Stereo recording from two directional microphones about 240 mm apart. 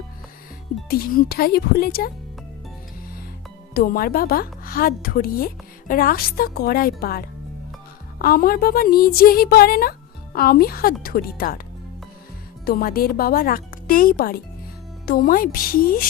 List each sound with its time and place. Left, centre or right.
0.9 s a woman's voice: left
3.8 s a woman's voice: left
12.6 s a woman's voice: left